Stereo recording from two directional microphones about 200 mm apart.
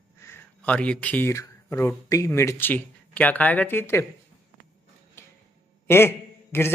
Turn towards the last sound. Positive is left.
turn(degrees=10)  # may be behind; listen again after turning